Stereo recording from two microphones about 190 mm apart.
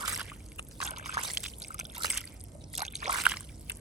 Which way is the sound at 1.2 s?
Centre (ahead or behind).